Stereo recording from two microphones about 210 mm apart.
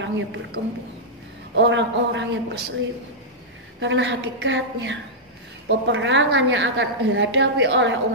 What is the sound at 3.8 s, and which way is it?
A woman's voice, 60° right (ahead or behind).